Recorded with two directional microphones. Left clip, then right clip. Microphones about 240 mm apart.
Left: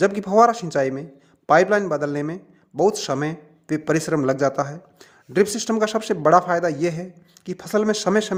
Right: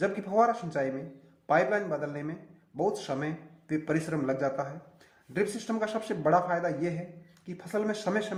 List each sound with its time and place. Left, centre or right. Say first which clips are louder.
0.0 s a man's voice: left 10 dB; left